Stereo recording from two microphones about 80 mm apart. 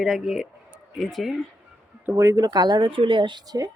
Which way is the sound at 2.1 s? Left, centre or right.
Right.